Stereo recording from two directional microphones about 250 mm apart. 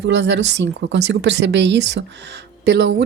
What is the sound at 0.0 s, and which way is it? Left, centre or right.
Speech, right.